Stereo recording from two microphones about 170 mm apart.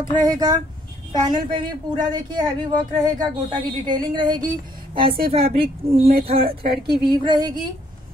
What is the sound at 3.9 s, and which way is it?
Speech, 25° right (ahead or behind).